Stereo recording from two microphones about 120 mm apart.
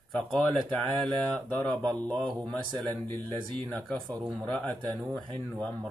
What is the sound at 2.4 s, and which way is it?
Speech, 10° left (ahead or behind).